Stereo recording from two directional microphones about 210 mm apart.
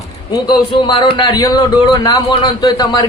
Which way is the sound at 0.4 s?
20° left (ahead or behind).